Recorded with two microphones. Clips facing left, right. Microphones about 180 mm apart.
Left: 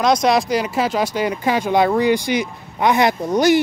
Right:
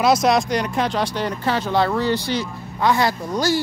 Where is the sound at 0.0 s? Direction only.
5° right (ahead or behind).